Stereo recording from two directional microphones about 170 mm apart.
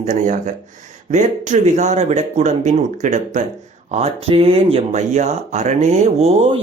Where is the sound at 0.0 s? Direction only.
45° right (ahead or behind).